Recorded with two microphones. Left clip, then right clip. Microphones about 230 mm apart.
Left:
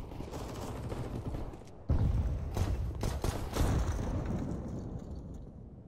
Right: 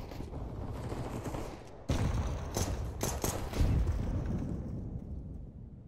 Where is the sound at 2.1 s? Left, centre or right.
Right.